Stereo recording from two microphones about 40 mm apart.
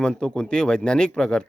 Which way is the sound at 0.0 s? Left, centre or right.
Centre.